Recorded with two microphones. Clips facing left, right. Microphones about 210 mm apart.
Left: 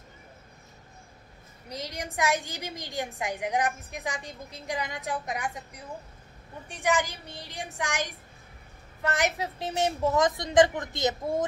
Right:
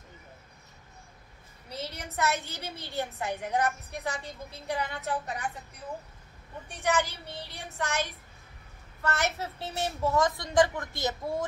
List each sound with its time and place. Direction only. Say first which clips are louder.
1.7 s a woman's voice: left 2 dB; 15° left (ahead or behind)
6.8 s a woman's voice: left 1 dB; 15° left (ahead or behind)